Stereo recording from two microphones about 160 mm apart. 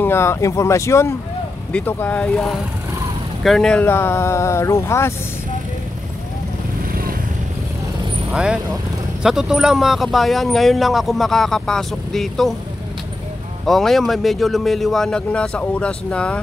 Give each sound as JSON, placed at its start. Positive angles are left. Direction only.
{"t": 0.0, "sound": "speech", "side_deg": 15}
{"t": 6.9, "sound": "vehicle", "side_deg": -65}
{"t": 8.3, "sound": "speech", "side_deg": -5}
{"t": 13.7, "sound": "speech", "side_deg": 0}